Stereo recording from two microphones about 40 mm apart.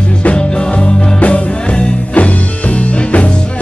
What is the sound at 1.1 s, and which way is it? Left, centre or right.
Music, left.